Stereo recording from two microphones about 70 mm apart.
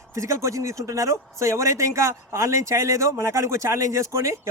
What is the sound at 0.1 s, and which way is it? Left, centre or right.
Speech, right.